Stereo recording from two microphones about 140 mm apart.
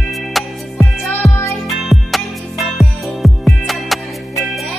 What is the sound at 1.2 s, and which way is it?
Music, 20° left (ahead or behind).